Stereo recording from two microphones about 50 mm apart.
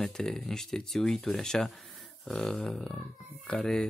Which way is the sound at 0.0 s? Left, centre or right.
Centre.